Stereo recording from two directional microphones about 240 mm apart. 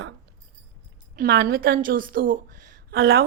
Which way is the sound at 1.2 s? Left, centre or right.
Right.